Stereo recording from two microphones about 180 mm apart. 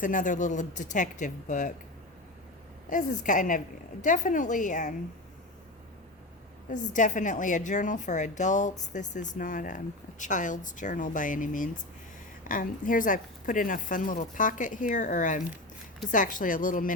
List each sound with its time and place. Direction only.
0.0 s a woman's voice: 45° left (ahead or behind)
2.9 s a woman's voice: 45° left (ahead or behind)
6.7 s a woman's voice: 45° left (ahead or behind)